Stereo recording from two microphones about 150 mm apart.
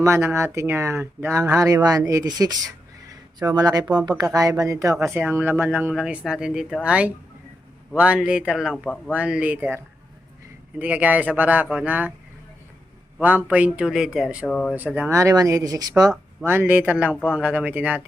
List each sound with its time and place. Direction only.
0.0 s speech: 15° right (ahead or behind)
13.1 s speech: 10° right (ahead or behind)
14.4 s speech: 5° left (ahead or behind)
14.7 s speech: 10° right (ahead or behind)
16.5 s speech: 15° right (ahead or behind)